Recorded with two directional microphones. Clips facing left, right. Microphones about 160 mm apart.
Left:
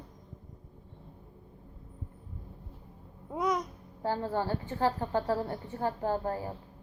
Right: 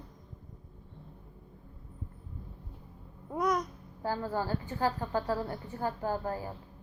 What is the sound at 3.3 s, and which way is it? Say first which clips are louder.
Babbling: even; 5° left (ahead or behind).